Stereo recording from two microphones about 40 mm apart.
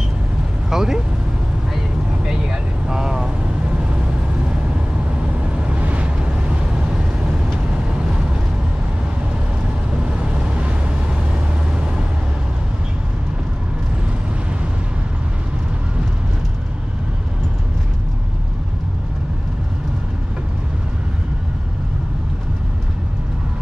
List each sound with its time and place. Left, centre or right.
0.7 s vehicle: centre
5.6 s vehicle: right